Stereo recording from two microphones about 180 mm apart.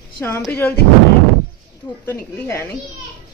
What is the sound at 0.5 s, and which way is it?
Speech, 10° left (ahead or behind).